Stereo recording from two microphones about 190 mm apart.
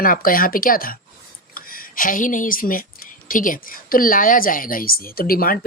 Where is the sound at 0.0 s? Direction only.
50° left (ahead or behind).